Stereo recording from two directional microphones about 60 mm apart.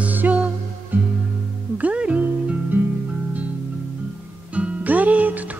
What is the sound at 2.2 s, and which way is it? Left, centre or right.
Music, right.